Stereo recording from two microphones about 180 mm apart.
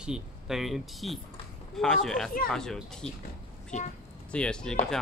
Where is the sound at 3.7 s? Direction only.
40° left (ahead or behind).